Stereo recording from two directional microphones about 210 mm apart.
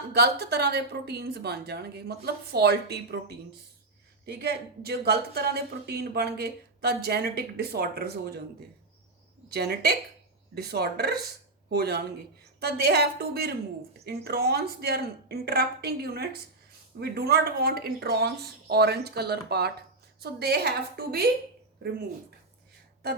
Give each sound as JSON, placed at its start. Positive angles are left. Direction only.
{"t": 0.1, "sound": "speech", "side_deg": -50}
{"t": 9.5, "sound": "speech", "side_deg": -50}